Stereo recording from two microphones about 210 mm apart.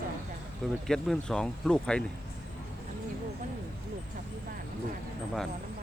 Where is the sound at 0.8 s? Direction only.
Centre (ahead or behind).